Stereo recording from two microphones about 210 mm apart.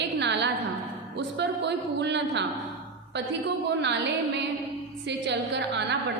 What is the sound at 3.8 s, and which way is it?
A woman's voice, 55° right (ahead or behind).